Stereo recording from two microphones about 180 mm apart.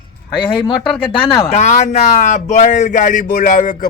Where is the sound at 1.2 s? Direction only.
35° left (ahead or behind).